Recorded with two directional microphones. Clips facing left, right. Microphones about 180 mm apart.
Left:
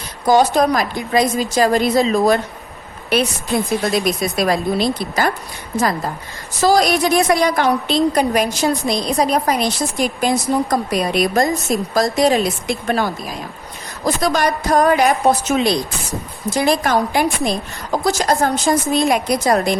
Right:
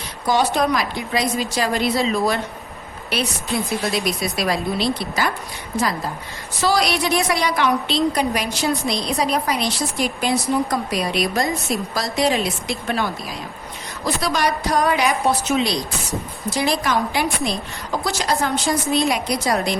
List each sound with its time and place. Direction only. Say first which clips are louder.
0.3 s a woman's voice: left 5 dB; 45° left (ahead or behind)
6.6 s a woman's voice: left 5 dB; 45° left (ahead or behind)